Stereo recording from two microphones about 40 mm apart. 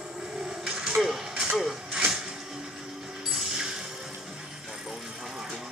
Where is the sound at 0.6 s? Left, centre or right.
Centre.